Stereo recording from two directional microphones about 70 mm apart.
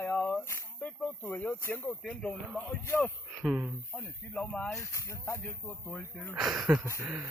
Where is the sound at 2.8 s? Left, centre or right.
Left.